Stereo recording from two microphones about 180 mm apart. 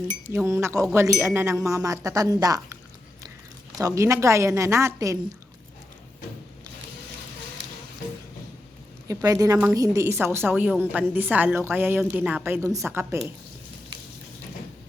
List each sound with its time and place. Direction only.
0.4 s a woman's voice: 15° right (ahead or behind)
3.8 s a woman's voice: 20° right (ahead or behind)
9.0 s a woman's voice: 20° right (ahead or behind)